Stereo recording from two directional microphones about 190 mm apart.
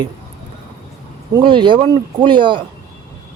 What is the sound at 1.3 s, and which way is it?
Speech, 25° right (ahead or behind).